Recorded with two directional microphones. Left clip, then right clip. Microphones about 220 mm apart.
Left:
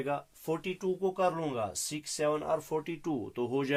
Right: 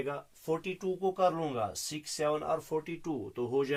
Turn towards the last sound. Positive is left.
turn(degrees=45)  # may be behind; listen again after turning